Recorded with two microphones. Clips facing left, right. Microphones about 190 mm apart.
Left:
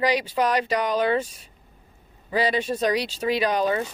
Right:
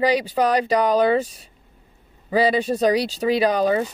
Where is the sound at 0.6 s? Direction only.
35° right (ahead or behind).